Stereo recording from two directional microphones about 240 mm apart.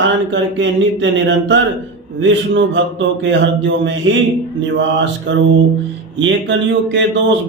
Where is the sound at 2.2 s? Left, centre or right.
Right.